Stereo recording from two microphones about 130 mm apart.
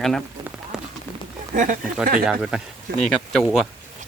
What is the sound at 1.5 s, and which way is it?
Speech, 80° right.